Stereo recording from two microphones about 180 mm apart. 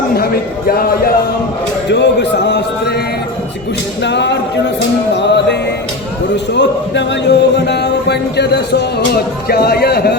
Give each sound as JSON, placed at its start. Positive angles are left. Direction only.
{"t": 0.8, "sound": "a man's voice", "side_deg": 55}
{"t": 1.9, "sound": "music", "side_deg": 70}
{"t": 4.0, "sound": "music", "side_deg": 75}
{"t": 9.5, "sound": "a man's voice", "side_deg": 60}